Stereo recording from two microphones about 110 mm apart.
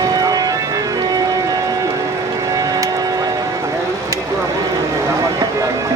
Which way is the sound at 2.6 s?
30° right (ahead or behind).